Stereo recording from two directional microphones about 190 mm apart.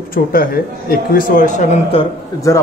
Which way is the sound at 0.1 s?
50° left (ahead or behind).